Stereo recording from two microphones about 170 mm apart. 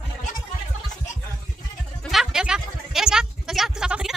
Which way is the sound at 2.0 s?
Centre (ahead or behind).